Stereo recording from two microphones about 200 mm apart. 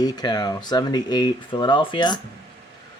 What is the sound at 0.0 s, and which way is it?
Speech, 20° left (ahead or behind).